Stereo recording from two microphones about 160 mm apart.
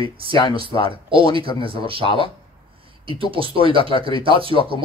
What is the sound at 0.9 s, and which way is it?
Speech, 35° right (ahead or behind).